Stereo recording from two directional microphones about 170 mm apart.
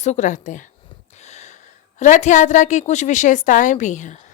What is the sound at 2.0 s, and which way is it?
A woman's voice, 45° left (ahead or behind).